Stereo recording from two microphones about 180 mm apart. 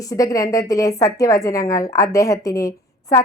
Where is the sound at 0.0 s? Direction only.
20° left (ahead or behind).